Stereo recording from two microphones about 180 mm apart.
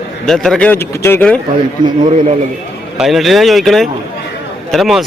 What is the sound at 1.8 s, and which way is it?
Speech, 25° right (ahead or behind).